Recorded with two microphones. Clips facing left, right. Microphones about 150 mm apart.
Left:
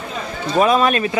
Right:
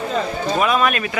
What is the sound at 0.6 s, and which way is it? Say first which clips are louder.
Speech: left 5 dB; 35° left (ahead or behind).